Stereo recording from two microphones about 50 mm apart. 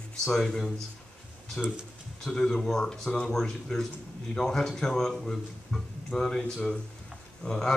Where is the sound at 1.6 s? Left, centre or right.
Left.